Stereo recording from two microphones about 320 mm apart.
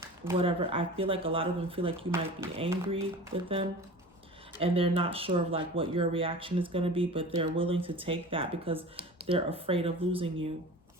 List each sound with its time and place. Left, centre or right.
0.0 s speech: centre
4.5 s speech: centre